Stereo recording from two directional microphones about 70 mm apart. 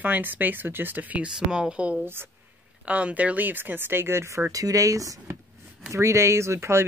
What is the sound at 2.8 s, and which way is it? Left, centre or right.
Speech, centre.